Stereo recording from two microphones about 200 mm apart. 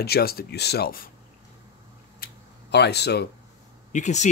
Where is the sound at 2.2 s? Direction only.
50° left (ahead or behind).